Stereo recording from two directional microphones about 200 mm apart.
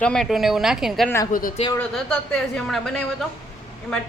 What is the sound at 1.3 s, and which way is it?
Speech, 45° left (ahead or behind).